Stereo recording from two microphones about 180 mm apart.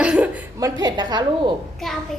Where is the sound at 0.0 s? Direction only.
5° right (ahead or behind).